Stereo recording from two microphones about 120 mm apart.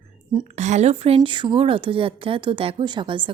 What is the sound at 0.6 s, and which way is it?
A woman's voice, 70° right (ahead or behind).